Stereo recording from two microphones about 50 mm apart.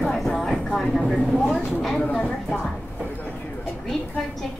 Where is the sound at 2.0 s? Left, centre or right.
Left.